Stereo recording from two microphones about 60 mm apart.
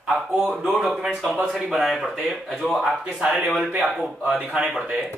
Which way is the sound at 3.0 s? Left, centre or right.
Centre.